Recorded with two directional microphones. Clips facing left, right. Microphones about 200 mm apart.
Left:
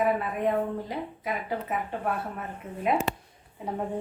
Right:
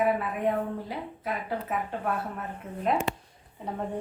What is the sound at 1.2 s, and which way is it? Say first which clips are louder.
A woman's voice: right 1 dB; 10° left (ahead or behind).